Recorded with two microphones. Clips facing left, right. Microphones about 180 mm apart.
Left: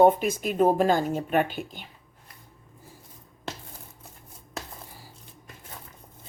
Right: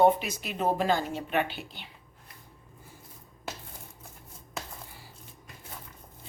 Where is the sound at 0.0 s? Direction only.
50° left (ahead or behind).